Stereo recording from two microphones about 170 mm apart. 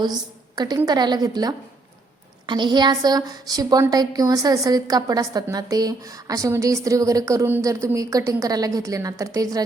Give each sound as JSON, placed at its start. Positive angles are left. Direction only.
{"t": 0.5, "sound": "a woman's voice", "side_deg": -25}